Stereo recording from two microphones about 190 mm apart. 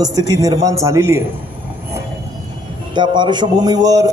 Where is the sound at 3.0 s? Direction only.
25° right (ahead or behind).